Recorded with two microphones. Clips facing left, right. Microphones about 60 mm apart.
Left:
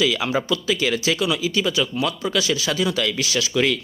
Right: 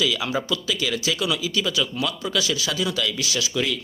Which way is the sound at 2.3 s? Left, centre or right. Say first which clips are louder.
Left 3 dB; left.